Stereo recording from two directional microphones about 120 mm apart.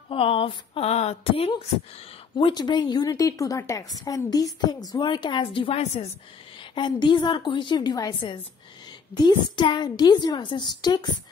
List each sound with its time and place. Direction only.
0.1 s speech: 50° left (ahead or behind)
2.3 s a woman's voice: 40° left (ahead or behind)
5.8 s a woman's voice: 65° left (ahead or behind)
6.7 s a woman's voice: 40° left (ahead or behind)
9.1 s a woman's voice: 35° left (ahead or behind)